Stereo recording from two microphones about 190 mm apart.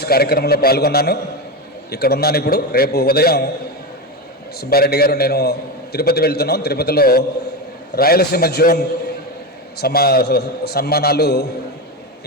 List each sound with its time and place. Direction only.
0.0 s a man's voice: 55° left (ahead or behind)
4.7 s a man's voice: 55° left (ahead or behind)
9.8 s a man's voice: 55° left (ahead or behind)